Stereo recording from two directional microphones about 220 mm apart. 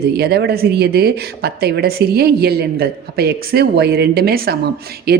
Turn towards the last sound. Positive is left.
turn(degrees=-45)  # may be behind; listen again after turning